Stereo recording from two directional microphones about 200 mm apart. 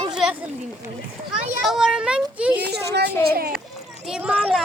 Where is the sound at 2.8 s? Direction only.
55° right (ahead or behind).